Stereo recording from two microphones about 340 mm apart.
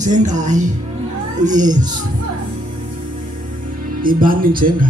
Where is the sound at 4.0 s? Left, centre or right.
Right.